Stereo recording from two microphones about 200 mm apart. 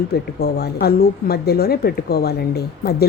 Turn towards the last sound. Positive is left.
turn(degrees=50)  # may be behind; listen again after turning